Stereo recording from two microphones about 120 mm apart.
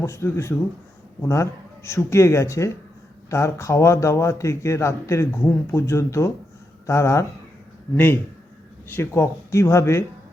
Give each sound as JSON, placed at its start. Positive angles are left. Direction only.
{"t": 0.0, "sound": "speech", "side_deg": 20}